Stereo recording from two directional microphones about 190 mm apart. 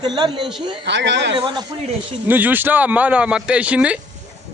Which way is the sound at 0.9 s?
70° right (ahead or behind).